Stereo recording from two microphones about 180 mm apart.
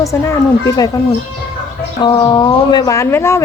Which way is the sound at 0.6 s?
20° left (ahead or behind).